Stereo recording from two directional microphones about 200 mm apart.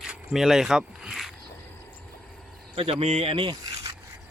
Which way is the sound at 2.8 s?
30° right (ahead or behind).